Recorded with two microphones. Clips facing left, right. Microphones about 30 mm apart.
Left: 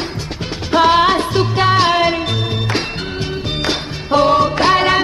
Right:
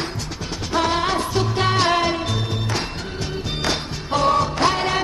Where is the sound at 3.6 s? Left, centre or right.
Left.